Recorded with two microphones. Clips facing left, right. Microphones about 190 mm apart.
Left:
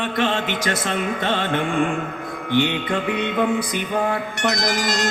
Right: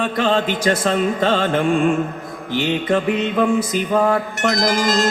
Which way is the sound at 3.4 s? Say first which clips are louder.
Right 4 dB; 40° right (ahead or behind).